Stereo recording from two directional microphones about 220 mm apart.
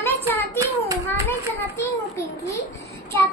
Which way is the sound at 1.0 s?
10° left (ahead or behind).